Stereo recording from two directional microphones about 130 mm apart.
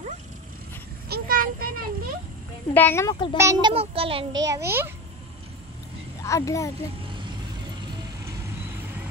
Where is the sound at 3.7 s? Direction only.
45° right (ahead or behind).